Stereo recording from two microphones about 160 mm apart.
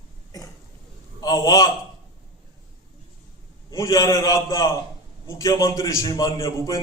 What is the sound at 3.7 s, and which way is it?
A man's voice, 20° left (ahead or behind).